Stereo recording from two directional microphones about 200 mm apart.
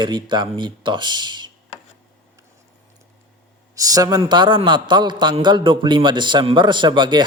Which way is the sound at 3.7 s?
15° right (ahead or behind).